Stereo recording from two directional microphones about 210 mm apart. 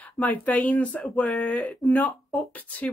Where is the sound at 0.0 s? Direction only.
10° left (ahead or behind).